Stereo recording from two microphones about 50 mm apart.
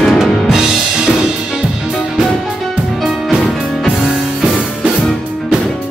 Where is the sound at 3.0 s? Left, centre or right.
Centre.